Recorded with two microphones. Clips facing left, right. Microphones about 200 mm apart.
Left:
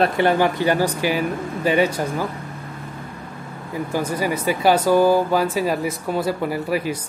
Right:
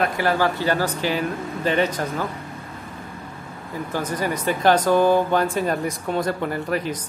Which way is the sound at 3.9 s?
10° left (ahead or behind).